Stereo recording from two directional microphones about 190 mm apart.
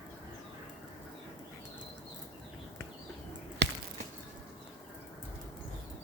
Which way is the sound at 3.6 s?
60° right (ahead or behind).